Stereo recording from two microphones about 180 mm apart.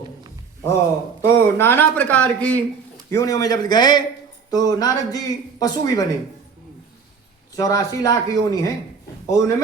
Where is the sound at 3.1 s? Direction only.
20° left (ahead or behind).